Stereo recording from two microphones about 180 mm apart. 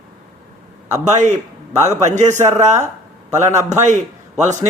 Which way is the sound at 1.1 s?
40° right (ahead or behind).